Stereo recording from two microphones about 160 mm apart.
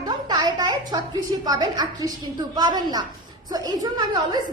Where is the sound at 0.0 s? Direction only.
25° right (ahead or behind).